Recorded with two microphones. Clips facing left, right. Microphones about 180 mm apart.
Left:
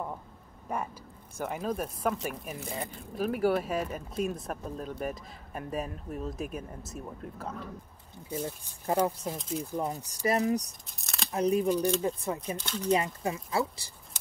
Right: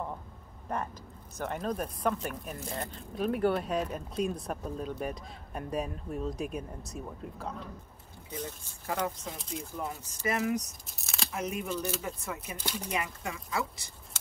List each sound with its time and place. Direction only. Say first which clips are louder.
0.7 s speech: left 1 dB; 10° left (ahead or behind)
8.8 s speech: left 6 dB; 30° left (ahead or behind)
10.9 s a sound: even; centre (ahead or behind)
11.3 s speech: left 9 dB; 35° left (ahead or behind)
12.6 s speech: left 4 dB; 10° right (ahead or behind)
12.9 s speech: left 10 dB; 30° left (ahead or behind)